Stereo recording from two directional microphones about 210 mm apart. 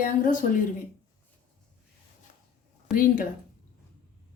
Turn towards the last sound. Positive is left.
turn(degrees=40)  # may be behind; listen again after turning